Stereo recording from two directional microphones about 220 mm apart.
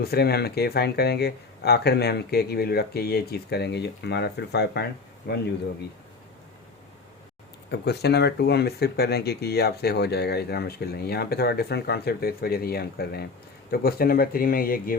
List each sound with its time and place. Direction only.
0.0 s speech: 45° left (ahead or behind)
7.7 s speech: 50° left (ahead or behind)